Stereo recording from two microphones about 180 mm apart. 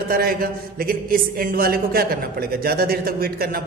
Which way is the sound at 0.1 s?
55° right (ahead or behind).